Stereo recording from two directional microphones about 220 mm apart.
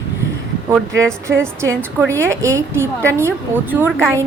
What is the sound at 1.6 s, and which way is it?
Speech, 10° right (ahead or behind).